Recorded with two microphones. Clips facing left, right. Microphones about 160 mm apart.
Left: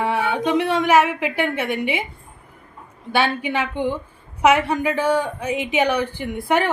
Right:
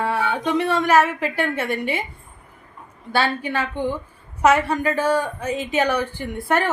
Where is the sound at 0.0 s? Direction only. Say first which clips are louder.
Left 2 dB; 15° left (ahead or behind).